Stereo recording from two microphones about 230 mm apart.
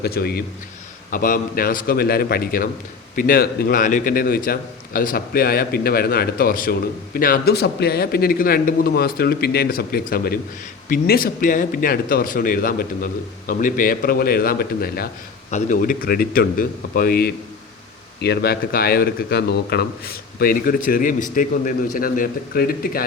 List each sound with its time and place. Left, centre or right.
0.0 s a man's voice: left